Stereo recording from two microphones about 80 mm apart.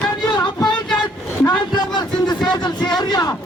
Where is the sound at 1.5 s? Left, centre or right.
Left.